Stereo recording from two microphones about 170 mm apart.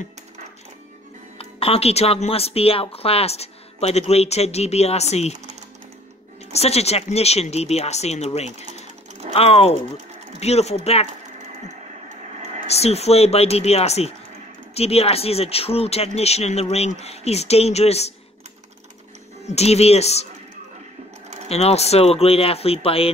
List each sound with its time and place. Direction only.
1.4 s speech: 35° left (ahead or behind)
6.5 s speech: 40° left (ahead or behind)
12.6 s speech: 40° left (ahead or behind)
19.4 s speech: 40° left (ahead or behind)
21.5 s speech: 40° left (ahead or behind)